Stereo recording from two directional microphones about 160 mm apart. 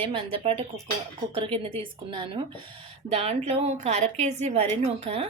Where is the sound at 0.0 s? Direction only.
35° right (ahead or behind).